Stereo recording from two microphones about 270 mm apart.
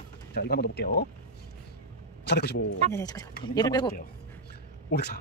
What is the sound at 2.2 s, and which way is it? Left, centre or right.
Speech, left.